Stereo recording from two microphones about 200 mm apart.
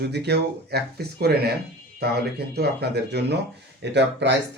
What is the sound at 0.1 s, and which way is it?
Speech, 55° right (ahead or behind).